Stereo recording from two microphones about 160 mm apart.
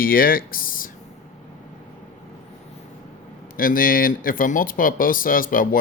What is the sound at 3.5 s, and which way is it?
Speech, 60° left (ahead or behind).